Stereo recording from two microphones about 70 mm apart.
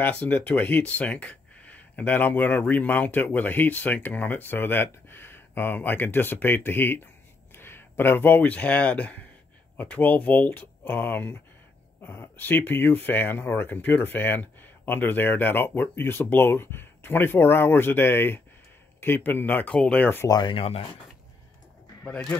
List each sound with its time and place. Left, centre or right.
0.0 s speech: left
20.2 s speech: left